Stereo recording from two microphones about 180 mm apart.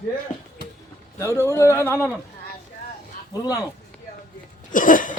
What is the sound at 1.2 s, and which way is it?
Speech, 15° left (ahead or behind).